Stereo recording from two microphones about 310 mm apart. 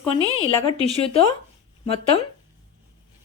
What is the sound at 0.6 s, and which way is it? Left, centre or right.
Speech, centre.